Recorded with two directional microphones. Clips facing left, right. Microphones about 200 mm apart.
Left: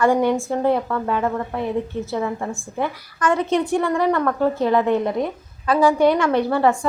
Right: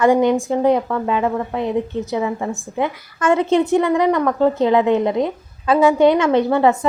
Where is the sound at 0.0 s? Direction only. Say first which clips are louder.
Right 3 dB; 20° right (ahead or behind).